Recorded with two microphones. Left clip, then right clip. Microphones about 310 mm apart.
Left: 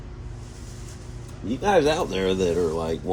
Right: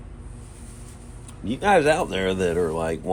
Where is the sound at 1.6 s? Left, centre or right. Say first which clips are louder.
Right 2 dB; right.